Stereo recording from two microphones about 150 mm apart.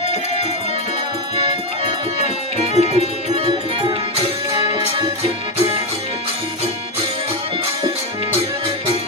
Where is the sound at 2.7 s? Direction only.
45° right (ahead or behind).